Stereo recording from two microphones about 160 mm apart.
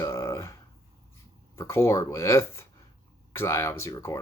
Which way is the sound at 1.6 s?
15° left (ahead or behind).